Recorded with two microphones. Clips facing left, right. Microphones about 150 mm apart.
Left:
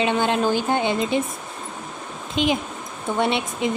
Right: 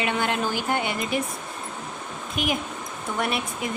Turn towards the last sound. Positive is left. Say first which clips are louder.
# left 5 dB
turn(degrees=25)  # may be behind; listen again after turning